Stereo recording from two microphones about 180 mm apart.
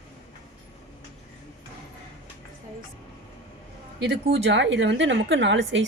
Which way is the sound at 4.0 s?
80° right.